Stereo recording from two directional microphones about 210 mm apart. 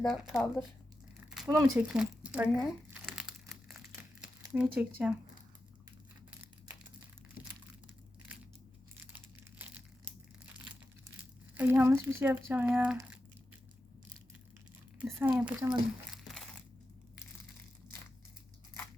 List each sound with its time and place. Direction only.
0.0 s speech: centre (ahead or behind)
1.5 s speech: 15° right (ahead or behind)
9.1 s crushing: 10° right (ahead or behind)
11.5 s speech: 10° right (ahead or behind)
14.9 s speech: 5° right (ahead or behind)
16.1 s crushing: centre (ahead or behind)